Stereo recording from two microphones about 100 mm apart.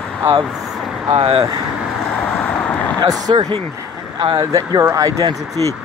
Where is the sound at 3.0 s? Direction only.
45° right (ahead or behind).